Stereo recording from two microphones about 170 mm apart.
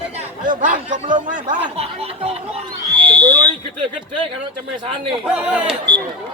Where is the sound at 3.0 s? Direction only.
25° right (ahead or behind).